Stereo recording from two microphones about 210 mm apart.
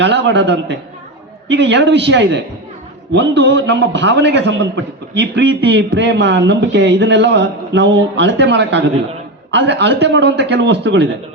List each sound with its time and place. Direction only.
0.0 s a man's voice: 55° right (ahead or behind)